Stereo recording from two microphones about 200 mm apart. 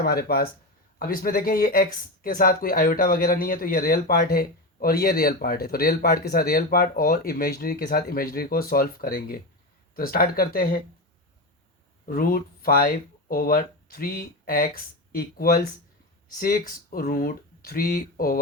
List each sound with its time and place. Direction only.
0.0 s speech: 50° left (ahead or behind)
12.0 s speech: 45° left (ahead or behind)